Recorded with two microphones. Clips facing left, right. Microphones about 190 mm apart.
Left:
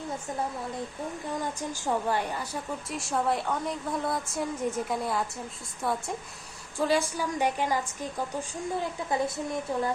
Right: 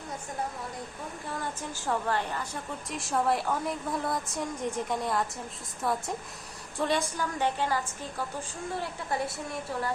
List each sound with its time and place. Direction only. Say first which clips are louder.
1.3 s a woman's voice: left 2 dB; 15° left (ahead or behind)
9.0 s a woman's voice: left 3 dB; 20° left (ahead or behind)